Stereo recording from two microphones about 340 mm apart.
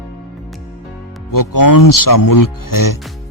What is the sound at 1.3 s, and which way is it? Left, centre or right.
Speech, left.